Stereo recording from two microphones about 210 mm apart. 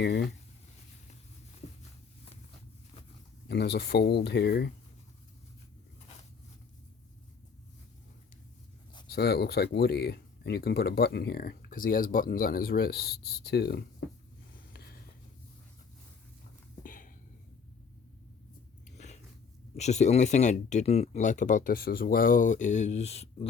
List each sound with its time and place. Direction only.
0.0 s speech: 50° left (ahead or behind)
3.5 s speech: 50° left (ahead or behind)
9.0 s speech: 50° left (ahead or behind)
16.8 s a sound: 40° left (ahead or behind)
18.9 s biting: 35° left (ahead or behind)
19.7 s speech: 35° left (ahead or behind)